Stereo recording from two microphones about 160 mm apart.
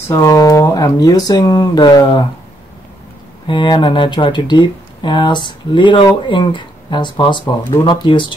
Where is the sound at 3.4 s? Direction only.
30° left (ahead or behind).